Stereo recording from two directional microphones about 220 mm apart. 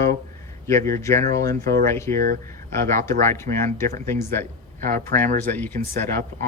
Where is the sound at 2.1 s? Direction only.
40° right (ahead or behind).